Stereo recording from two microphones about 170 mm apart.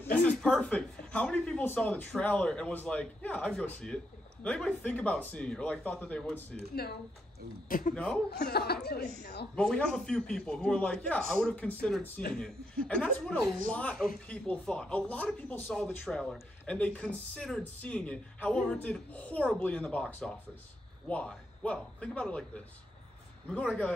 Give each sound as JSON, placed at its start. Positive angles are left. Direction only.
{"t": 0.0, "sound": "a man's voice", "side_deg": 10}
{"t": 6.7, "sound": "speech", "side_deg": 65}
{"t": 7.6, "sound": "a man's voice", "side_deg": 55}
{"t": 7.9, "sound": "speech", "side_deg": 5}
{"t": 8.3, "sound": "speech", "side_deg": 70}
{"t": 9.6, "sound": "a man's voice", "side_deg": 5}